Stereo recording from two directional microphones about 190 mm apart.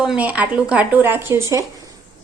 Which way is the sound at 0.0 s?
5° right (ahead or behind).